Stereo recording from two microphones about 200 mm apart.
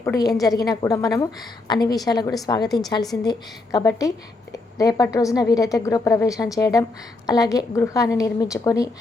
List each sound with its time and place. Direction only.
0.0 s a woman's voice: 15° left (ahead or behind)